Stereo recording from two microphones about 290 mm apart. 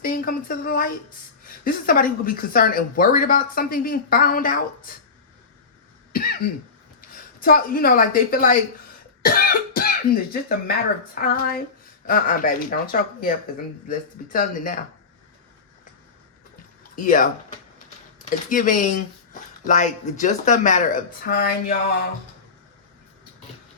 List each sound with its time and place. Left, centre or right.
0.0 s a woman's voice: left
6.1 s a woman's voice: left
9.2 s cough: left
10.7 s a woman's voice: left
14.3 s a woman's voice: left
16.9 s speech: left
18.4 s a woman's voice: left